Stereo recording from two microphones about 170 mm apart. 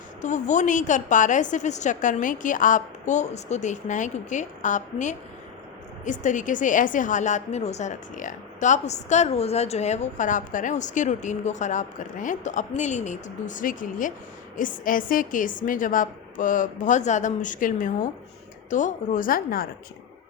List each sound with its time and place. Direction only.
0.2 s a woman's voice: 45° left (ahead or behind)